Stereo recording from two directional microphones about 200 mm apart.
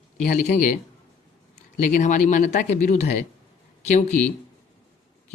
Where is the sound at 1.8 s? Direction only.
40° left (ahead or behind).